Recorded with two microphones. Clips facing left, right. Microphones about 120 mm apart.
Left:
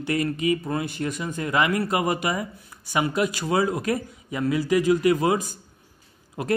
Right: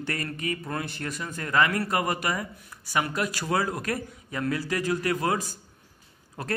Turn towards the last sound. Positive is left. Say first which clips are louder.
# left 6 dB
turn(degrees=15)  # may be behind; listen again after turning